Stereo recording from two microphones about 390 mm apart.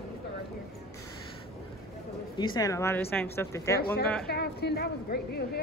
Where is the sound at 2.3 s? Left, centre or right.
Centre.